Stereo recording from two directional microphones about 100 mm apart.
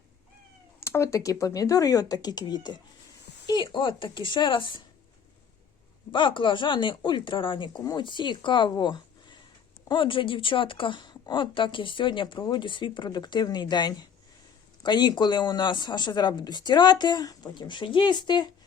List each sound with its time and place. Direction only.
0.8 s a woman's voice: 25° left (ahead or behind); by 4.9 s 55° left (ahead or behind)
6.1 s speech: 55° left (ahead or behind)
8.7 s a sound: 45° left (ahead or behind)
9.9 s a woman's voice: 55° left (ahead or behind)